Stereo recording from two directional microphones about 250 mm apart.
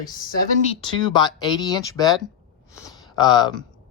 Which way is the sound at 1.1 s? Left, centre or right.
Centre.